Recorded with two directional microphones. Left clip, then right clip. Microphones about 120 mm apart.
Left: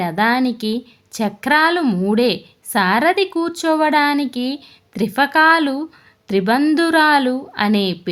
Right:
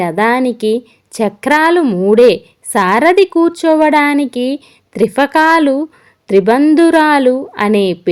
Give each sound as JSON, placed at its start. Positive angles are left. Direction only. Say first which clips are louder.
{"t": 0.0, "sound": "a woman's voice", "louder": "right 5 dB", "side_deg": -30}
{"t": 1.8, "sound": "a woman's voice", "louder": "right 8 dB", "side_deg": -20}
{"t": 2.1, "sound": "a woman's voice", "louder": "right 10 dB", "side_deg": -30}